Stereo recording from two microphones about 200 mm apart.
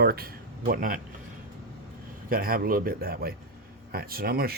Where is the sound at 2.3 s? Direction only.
45° right (ahead or behind).